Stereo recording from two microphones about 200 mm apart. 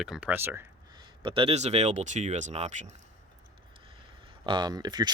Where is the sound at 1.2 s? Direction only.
25° right (ahead or behind).